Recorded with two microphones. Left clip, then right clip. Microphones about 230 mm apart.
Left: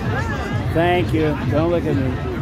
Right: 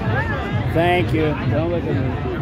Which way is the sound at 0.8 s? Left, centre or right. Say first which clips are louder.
Even; centre.